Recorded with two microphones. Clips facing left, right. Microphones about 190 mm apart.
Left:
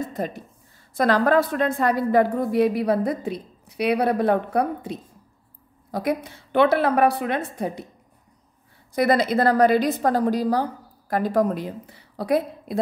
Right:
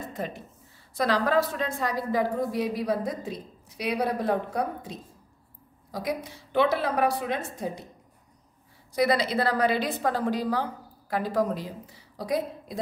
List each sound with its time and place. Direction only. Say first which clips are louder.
0.1 s speech: left 5 dB; 40° left (ahead or behind)
0.9 s a woman's voice: left 5 dB; 50° left (ahead or behind)
8.9 s a woman's voice: left 4 dB; 50° left (ahead or behind)